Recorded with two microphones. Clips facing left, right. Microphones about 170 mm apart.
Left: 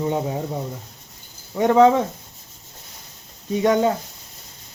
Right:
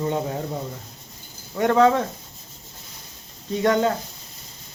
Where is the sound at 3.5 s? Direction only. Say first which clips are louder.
Left 2 dB; 15° left (ahead or behind).